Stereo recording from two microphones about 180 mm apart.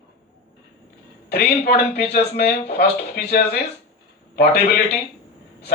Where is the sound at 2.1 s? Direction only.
60° left (ahead or behind).